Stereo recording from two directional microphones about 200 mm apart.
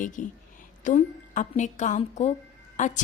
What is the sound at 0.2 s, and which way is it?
A woman's voice, 40° left (ahead or behind).